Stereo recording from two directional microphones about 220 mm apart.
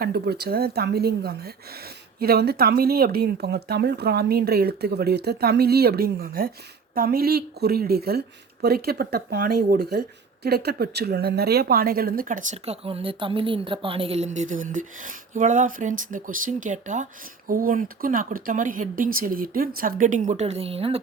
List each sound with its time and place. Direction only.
0.0 s a woman's voice: 45° right (ahead or behind); by 21.0 s 25° right (ahead or behind)